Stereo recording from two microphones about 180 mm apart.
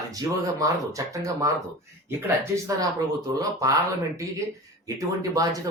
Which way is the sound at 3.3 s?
20° right (ahead or behind).